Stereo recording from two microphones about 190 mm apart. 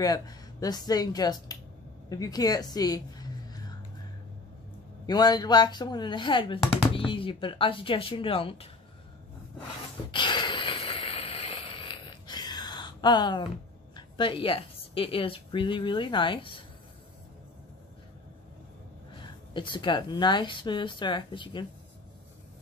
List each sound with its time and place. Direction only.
0.0 s a woman's voice: 20° left (ahead or behind)
5.0 s speech: 20° left (ahead or behind)
10.1 s a sound: 25° left (ahead or behind)
13.9 s a woman's voice: 25° left (ahead or behind)
19.5 s speech: 25° left (ahead or behind)